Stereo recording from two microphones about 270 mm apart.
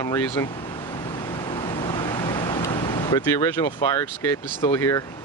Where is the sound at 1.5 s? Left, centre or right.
Centre.